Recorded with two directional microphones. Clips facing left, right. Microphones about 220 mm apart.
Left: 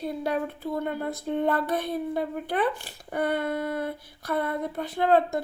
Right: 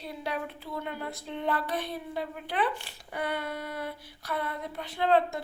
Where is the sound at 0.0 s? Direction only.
50° left (ahead or behind).